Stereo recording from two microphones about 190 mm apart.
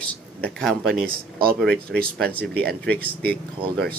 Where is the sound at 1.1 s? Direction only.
50° right (ahead or behind).